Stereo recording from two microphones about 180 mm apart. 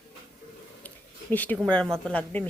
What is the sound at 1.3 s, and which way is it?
Speech, 10° left (ahead or behind).